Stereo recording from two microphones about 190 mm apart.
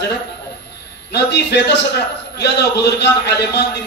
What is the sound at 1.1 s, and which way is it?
A man's voice, 65° left (ahead or behind).